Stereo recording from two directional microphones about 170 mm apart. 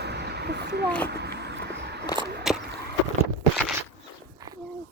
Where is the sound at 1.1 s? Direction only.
75° right (ahead or behind).